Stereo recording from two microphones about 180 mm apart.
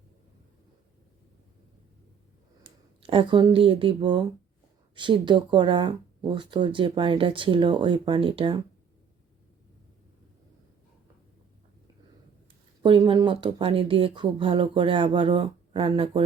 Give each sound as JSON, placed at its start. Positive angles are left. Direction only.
{"t": 2.6, "sound": "speech", "side_deg": -30}
{"t": 12.8, "sound": "speech", "side_deg": -25}